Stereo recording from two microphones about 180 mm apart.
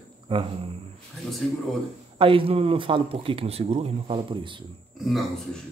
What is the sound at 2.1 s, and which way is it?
Speech, 30° right (ahead or behind).